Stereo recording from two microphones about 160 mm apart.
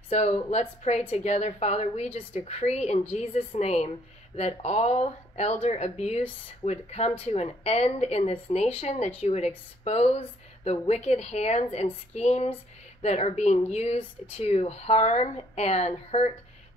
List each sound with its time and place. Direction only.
0.1 s a woman's voice: 40° left (ahead or behind)